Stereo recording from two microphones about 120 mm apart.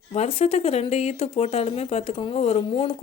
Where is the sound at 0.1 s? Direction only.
60° left (ahead or behind).